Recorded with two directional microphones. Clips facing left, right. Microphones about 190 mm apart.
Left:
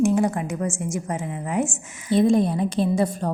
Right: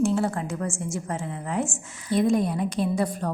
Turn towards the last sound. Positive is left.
turn(degrees=25)  # may be behind; listen again after turning